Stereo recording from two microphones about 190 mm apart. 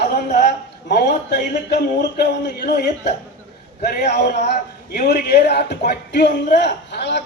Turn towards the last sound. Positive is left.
turn(degrees=65)  # may be behind; listen again after turning